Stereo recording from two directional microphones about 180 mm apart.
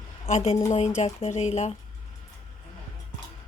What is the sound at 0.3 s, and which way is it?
Speech, 40° left (ahead or behind).